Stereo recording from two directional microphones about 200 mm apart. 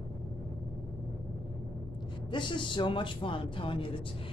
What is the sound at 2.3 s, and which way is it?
Speech, 25° left (ahead or behind).